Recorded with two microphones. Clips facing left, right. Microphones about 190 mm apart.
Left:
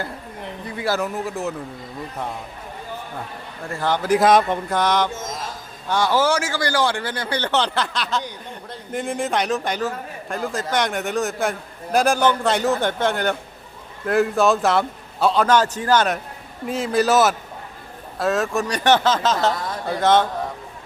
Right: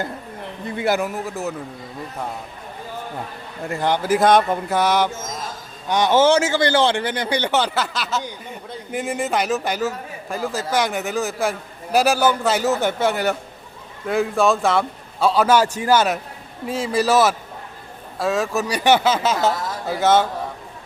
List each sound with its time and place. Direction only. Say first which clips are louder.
0.8 s speech: right 3 dB; 20° right (ahead or behind)
1.0 s speech: even; centre (ahead or behind)
3.7 s speech: even; 15° right (ahead or behind)
5.9 s speech: right 4 dB; 20° right (ahead or behind); by 20.2 s 5° right (ahead or behind)